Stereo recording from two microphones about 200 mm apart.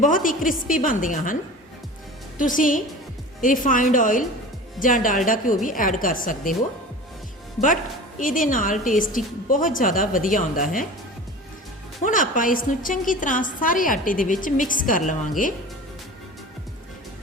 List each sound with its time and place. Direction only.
0.0 s a woman's voice: 40° left (ahead or behind)
2.4 s a woman's voice: 40° left (ahead or behind)
8.2 s a woman's voice: 40° left (ahead or behind)
12.0 s a woman's voice: 40° left (ahead or behind)